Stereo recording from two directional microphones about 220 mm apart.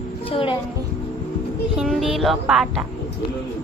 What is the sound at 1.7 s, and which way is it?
Speech, centre (ahead or behind).